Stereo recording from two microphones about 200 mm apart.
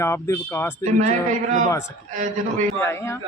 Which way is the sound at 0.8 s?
40° right (ahead or behind).